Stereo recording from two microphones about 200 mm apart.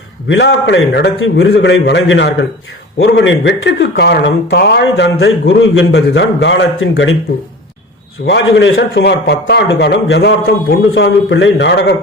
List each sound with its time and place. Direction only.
0.3 s a man's voice: 65° left (ahead or behind)
8.3 s a man's voice: 65° left (ahead or behind)